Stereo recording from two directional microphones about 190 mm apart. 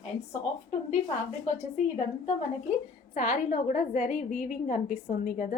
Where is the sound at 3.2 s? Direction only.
40° left (ahead or behind).